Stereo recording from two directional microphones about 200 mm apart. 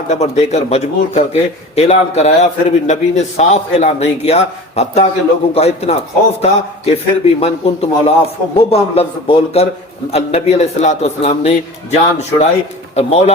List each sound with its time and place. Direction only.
0.1 s a man's voice: 30° left (ahead or behind)